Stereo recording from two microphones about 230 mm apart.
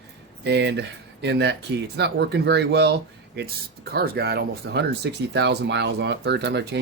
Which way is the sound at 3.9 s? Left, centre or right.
Right.